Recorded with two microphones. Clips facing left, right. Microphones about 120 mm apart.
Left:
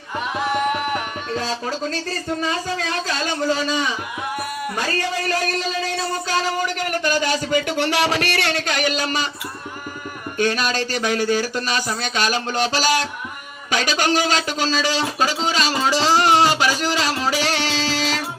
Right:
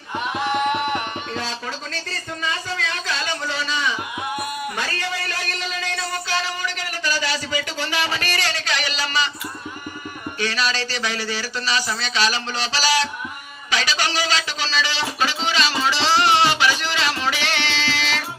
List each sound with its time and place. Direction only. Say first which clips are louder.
0.3 s music: even; centre (ahead or behind)
1.3 s music: left 4 dB; 40° left (ahead or behind)
2.4 s speech: even; 40° left (ahead or behind)
5.8 s speech: left 4 dB; 40° left (ahead or behind)
10.3 s speech: left 4 dB; 50° left (ahead or behind)
13.7 s a sound: left 4 dB; 50° left (ahead or behind)